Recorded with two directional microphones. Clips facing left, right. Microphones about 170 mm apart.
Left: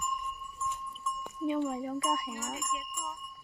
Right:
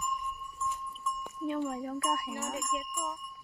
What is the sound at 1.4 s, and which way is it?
Speech, 5° left (ahead or behind).